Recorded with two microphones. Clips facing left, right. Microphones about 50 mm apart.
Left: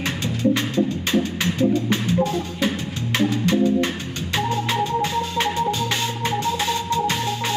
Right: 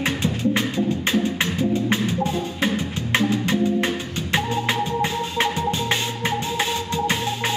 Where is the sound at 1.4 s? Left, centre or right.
Right.